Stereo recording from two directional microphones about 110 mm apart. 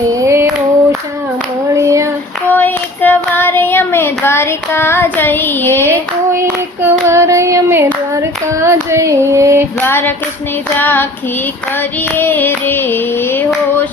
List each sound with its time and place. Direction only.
0.1 s female singing: 30° right (ahead or behind)
1.7 s child singing: 25° right (ahead or behind)
2.5 s child singing: 15° left (ahead or behind)
6.3 s child singing: 25° right (ahead or behind)
8.1 s female singing: 25° right (ahead or behind)
9.8 s female singing: 20° left (ahead or behind)
10.8 s child singing: 15° left (ahead or behind)
12.1 s female singing: 20° left (ahead or behind)